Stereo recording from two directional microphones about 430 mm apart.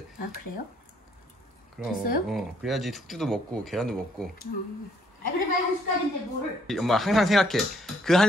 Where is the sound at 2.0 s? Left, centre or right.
Centre.